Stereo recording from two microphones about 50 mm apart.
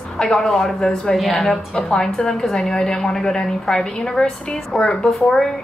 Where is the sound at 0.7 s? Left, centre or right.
Centre.